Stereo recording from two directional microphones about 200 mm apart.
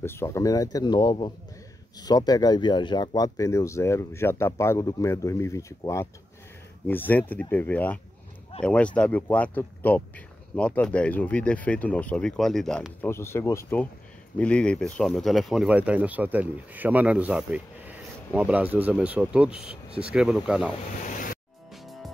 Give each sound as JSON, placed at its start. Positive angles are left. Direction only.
{"t": 0.0, "sound": "speech", "side_deg": 10}
{"t": 21.0, "sound": "music", "side_deg": 40}